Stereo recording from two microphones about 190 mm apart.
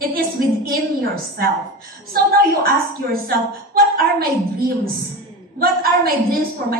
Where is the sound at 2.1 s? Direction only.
50° right (ahead or behind).